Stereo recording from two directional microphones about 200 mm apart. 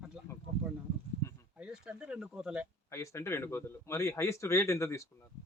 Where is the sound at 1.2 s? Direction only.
15° left (ahead or behind).